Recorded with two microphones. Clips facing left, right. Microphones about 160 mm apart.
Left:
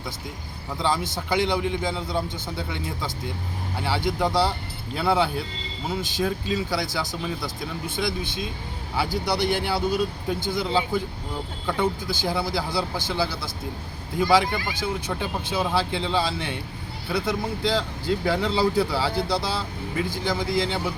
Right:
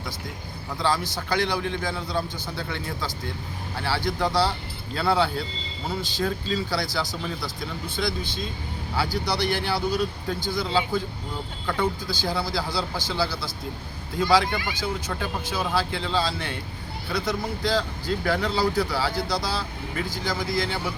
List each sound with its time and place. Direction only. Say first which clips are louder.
0.8 s speech: even; 20° left (ahead or behind)